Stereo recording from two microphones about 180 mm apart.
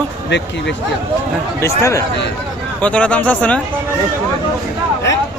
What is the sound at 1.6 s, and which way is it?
Speech, 15° left (ahead or behind).